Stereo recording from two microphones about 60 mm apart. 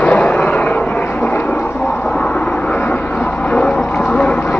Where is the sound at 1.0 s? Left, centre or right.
Left.